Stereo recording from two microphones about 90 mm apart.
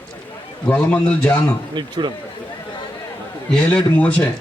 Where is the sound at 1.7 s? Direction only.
55° right (ahead or behind).